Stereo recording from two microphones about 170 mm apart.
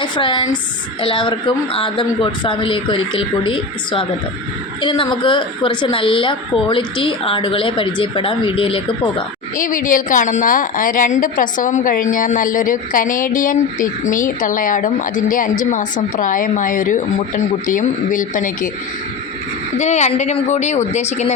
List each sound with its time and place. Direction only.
0.0 s a woman's voice: 30° left (ahead or behind)
9.6 s a woman's voice: 50° left (ahead or behind)
19.8 s a woman's voice: 45° left (ahead or behind)